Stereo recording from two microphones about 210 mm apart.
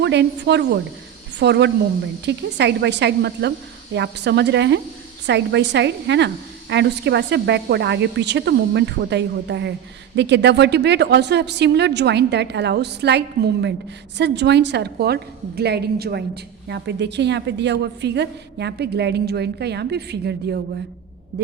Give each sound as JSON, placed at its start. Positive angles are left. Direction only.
{"t": 0.0, "sound": "a woman's voice", "side_deg": -55}